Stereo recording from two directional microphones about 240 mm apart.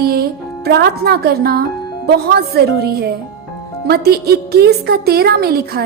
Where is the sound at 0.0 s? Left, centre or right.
Right.